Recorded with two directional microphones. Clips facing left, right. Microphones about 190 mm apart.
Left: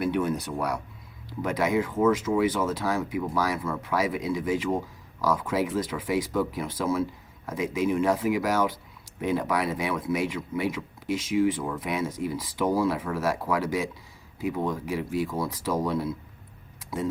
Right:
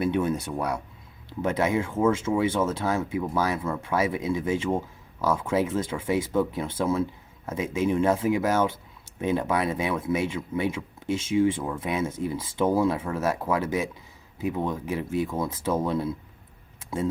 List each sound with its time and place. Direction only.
0.0 s speech: 25° right (ahead or behind)